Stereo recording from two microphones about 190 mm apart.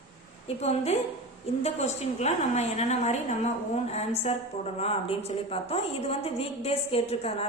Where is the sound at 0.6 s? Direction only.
35° left (ahead or behind).